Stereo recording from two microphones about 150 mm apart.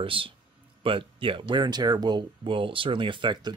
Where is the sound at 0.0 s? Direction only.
35° right (ahead or behind).